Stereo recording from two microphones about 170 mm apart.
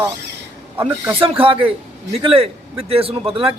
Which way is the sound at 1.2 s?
30° right (ahead or behind).